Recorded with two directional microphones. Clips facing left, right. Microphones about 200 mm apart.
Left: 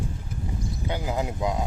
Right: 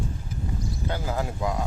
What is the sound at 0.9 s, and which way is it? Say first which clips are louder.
Speech: left 2 dB; 15° left (ahead or behind).